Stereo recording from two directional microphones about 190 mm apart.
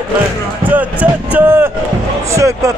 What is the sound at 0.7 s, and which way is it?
A man's voice, 10° right (ahead or behind).